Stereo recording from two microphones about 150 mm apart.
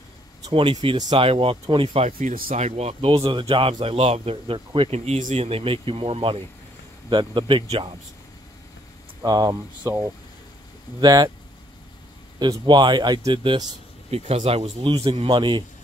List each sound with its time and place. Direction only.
0.5 s a man's voice: 35° right (ahead or behind)
2.1 s speech: 75° right (ahead or behind)
2.5 s a man's voice: 45° right (ahead or behind)
9.2 s speech: 25° right (ahead or behind)
12.4 s speech: 30° right (ahead or behind)
14.1 s a man's voice: 45° right (ahead or behind)